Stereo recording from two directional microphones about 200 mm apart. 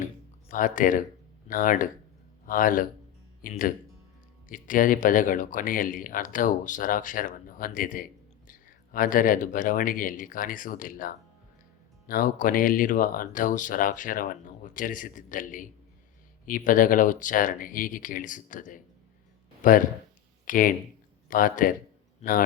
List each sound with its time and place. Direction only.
0.5 s speech: 40° left (ahead or behind)